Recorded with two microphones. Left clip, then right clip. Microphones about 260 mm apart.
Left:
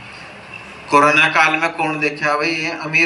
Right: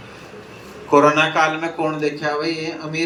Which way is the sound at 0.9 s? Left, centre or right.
Left.